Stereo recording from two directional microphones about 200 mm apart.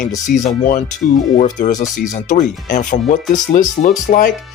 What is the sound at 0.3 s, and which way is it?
Speech, 50° left (ahead or behind).